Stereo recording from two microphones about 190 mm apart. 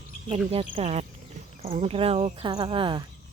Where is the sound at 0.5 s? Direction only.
30° right (ahead or behind).